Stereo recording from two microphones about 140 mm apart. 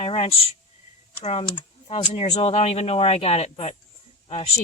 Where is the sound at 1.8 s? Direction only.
40° left (ahead or behind).